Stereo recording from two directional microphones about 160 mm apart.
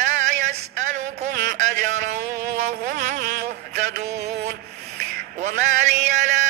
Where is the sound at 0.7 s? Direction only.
50° right (ahead or behind).